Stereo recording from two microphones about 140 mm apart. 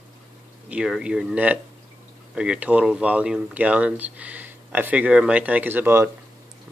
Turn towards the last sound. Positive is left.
turn(degrees=-15)  # may be behind; listen again after turning